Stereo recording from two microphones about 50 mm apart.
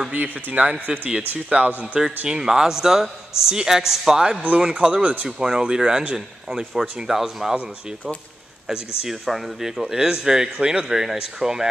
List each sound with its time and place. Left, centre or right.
0.1 s speech: right
2.2 s a man's voice: centre
4.4 s a man's voice: right; by 7.5 s centre
9.2 s a man's voice: centre